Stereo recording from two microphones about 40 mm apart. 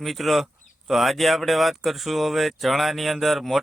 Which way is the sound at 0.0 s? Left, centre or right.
Centre.